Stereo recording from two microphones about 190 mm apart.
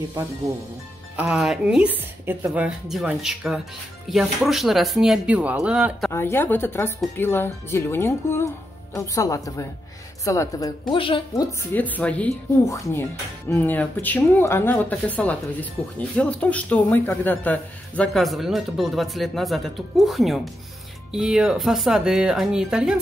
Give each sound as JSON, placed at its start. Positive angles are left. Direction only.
{"t": 1.1, "sound": "speech", "side_deg": -5}
{"t": 6.1, "sound": "a woman's voice", "side_deg": 10}
{"t": 11.7, "sound": "speech", "side_deg": 10}